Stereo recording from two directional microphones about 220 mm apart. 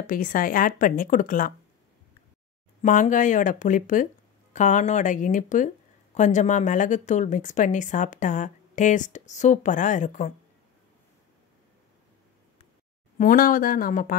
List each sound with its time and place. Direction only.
0.0 s a woman's voice: 40° left (ahead or behind)
2.8 s a woman's voice: 35° left (ahead or behind)
13.2 s a woman's voice: 40° left (ahead or behind)